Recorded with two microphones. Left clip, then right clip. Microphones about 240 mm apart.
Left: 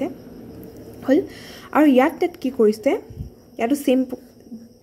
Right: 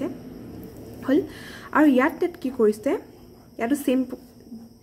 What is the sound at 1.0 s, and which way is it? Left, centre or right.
A woman's voice, centre.